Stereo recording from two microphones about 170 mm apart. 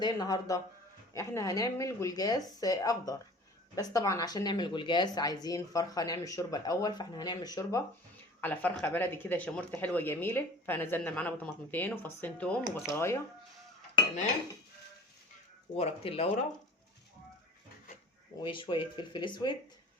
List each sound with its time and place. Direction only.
0.0 s speech: 25° left (ahead or behind)
8.4 s speech: 10° left (ahead or behind)
15.7 s speech: 35° left (ahead or behind)
18.4 s speech: 30° left (ahead or behind)